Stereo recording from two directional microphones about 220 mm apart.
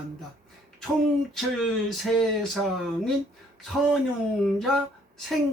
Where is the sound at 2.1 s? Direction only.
Centre (ahead or behind).